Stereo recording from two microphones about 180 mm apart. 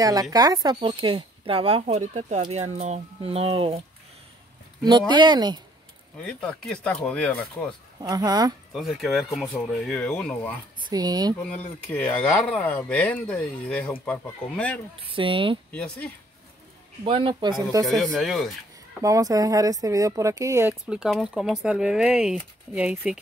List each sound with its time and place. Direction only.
0.0 s a woman's voice: 20° right (ahead or behind)
4.8 s a woman's voice: 25° right (ahead or behind)
6.2 s speech: 5° left (ahead or behind)
8.0 s a woman's voice: 20° right (ahead or behind)
8.7 s speech: centre (ahead or behind)
10.9 s a woman's voice: 20° right (ahead or behind)
11.4 s speech: 10° left (ahead or behind)
15.0 s a woman's voice: 30° right (ahead or behind)
17.0 s a woman's voice: 30° right (ahead or behind)
18.1 s speech: centre (ahead or behind)
18.9 s a woman's voice: 20° right (ahead or behind)
20.8 s speech: 5° right (ahead or behind)